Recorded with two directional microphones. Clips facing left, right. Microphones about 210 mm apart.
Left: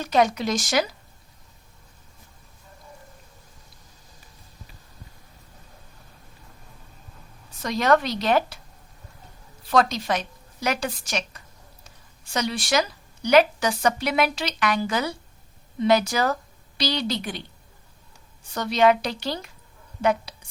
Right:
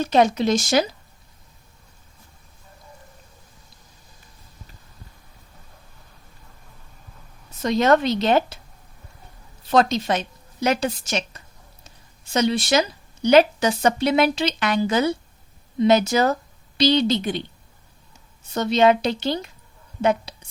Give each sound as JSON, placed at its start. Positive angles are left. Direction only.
{"t": 0.0, "sound": "speech", "side_deg": -25}
{"t": 7.5, "sound": "speech", "side_deg": -25}
{"t": 9.6, "sound": "a woman's voice", "side_deg": -25}
{"t": 11.8, "sound": "a sound", "side_deg": -25}
{"t": 13.2, "sound": "a woman's voice", "side_deg": -25}
{"t": 18.4, "sound": "speech", "side_deg": -25}